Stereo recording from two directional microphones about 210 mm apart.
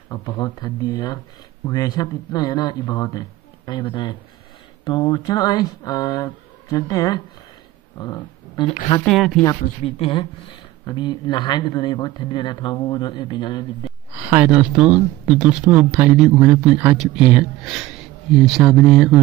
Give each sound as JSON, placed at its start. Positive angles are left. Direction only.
{"t": 0.1, "sound": "speech", "side_deg": 20}
{"t": 9.0, "sound": "speech", "side_deg": 0}
{"t": 9.8, "sound": "speech", "side_deg": 25}
{"t": 14.1, "sound": "speech", "side_deg": -10}